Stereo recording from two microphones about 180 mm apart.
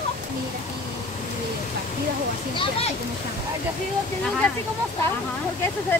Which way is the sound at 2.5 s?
35° left (ahead or behind).